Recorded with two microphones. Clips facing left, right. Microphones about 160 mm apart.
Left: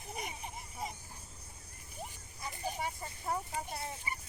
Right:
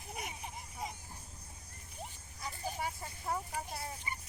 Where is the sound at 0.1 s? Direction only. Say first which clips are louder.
Left 1 dB; centre (ahead or behind).